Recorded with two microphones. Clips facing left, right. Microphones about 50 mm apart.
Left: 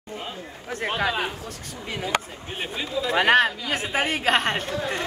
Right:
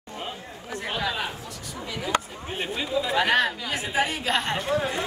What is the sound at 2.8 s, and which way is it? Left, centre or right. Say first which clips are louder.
Speech: even; centre.